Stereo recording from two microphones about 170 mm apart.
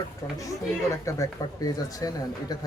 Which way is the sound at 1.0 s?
20° left (ahead or behind).